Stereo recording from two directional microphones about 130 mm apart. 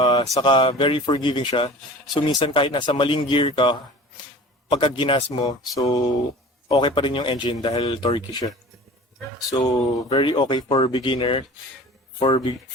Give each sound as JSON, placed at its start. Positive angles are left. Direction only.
{"t": 0.0, "sound": "a sound", "side_deg": 30}
{"t": 0.3, "sound": "speech", "side_deg": 40}
{"t": 5.7, "sound": "speech", "side_deg": 30}
{"t": 6.7, "sound": "speech", "side_deg": 40}